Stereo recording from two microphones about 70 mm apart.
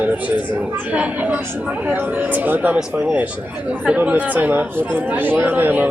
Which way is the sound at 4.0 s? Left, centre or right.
Right.